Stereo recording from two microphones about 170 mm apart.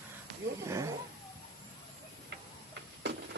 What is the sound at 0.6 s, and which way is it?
Speech, 20° right (ahead or behind).